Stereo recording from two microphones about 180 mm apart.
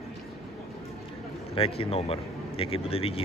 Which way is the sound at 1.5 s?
30° left (ahead or behind).